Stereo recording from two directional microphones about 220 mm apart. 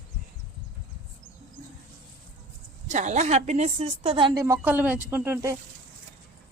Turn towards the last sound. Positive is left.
turn(degrees=-10)  # may be behind; listen again after turning